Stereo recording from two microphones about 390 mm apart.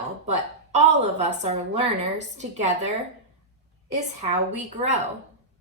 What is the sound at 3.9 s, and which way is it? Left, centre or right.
A woman's voice, centre.